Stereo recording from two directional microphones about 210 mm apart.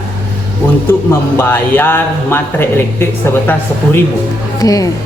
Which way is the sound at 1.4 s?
10° left (ahead or behind).